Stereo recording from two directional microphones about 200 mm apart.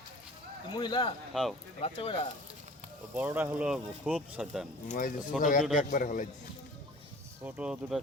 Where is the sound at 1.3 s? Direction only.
Centre (ahead or behind).